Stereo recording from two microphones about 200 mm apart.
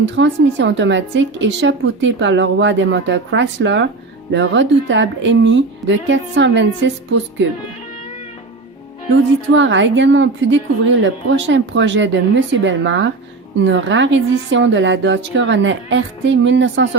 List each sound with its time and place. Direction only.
0.0 s a woman's voice: 65° right (ahead or behind)
9.6 s a woman's voice: 70° right (ahead or behind)